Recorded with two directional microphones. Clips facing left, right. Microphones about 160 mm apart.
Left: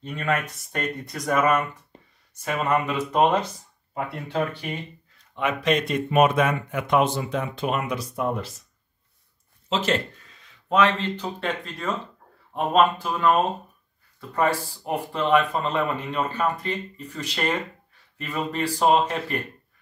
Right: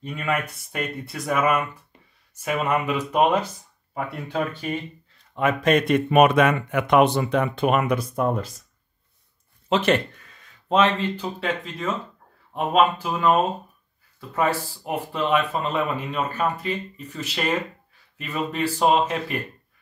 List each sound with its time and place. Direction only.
0.0 s speech: 10° right (ahead or behind)
3.9 s speech: 25° left (ahead or behind)
5.3 s speech: 45° right (ahead or behind)
9.7 s speech: 65° right (ahead or behind)
11.0 s speech: 5° right (ahead or behind)